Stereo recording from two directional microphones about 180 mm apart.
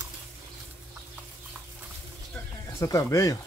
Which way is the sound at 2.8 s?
15° left (ahead or behind).